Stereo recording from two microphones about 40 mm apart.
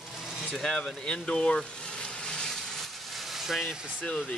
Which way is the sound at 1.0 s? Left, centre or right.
Left.